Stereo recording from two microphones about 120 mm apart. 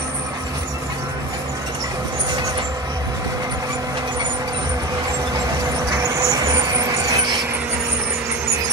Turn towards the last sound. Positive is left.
turn(degrees=-30)  # may be behind; listen again after turning